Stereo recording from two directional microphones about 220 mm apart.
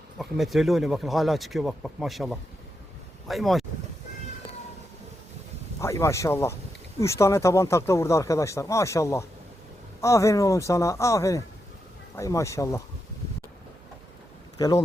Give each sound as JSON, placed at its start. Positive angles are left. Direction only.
{"t": 0.2, "sound": "speech", "side_deg": 0}
{"t": 5.8, "sound": "speech", "side_deg": 15}